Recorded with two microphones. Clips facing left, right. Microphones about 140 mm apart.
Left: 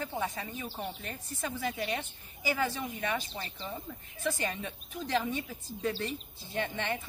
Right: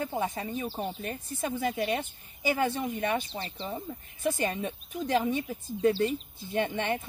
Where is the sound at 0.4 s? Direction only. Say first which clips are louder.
Right 6 dB; 30° right (ahead or behind).